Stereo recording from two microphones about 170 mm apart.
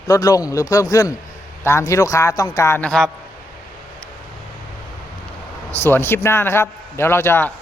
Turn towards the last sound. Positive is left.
turn(degrees=10)  # may be behind; listen again after turning